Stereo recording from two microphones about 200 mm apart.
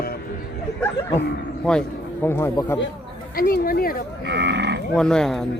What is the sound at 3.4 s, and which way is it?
Speech, 45° left (ahead or behind).